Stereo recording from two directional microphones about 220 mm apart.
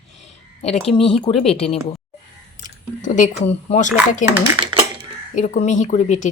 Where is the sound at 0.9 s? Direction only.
25° left (ahead or behind).